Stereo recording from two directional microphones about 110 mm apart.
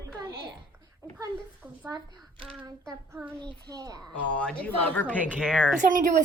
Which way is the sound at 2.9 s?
20° right (ahead or behind).